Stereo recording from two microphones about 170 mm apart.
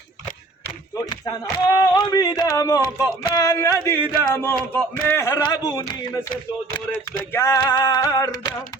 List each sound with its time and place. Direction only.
0.9 s a man's voice: 25° left (ahead or behind)
7.3 s a man's voice: 15° left (ahead or behind)